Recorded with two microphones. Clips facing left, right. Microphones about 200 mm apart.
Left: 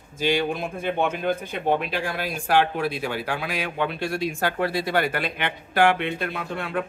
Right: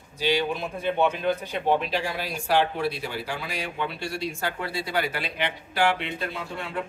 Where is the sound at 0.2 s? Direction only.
50° left (ahead or behind).